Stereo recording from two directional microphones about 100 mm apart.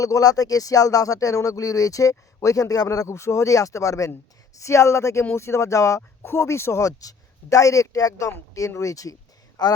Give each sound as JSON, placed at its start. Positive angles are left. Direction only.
{"t": 0.0, "sound": "speech", "side_deg": 35}